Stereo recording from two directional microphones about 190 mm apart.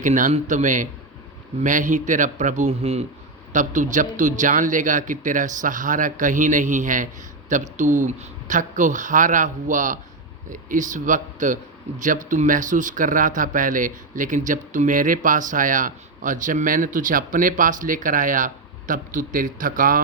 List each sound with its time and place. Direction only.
0.0 s a man's voice: 40° right (ahead or behind)